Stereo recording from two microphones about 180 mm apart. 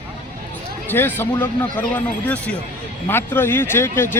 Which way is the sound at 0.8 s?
10° left (ahead or behind).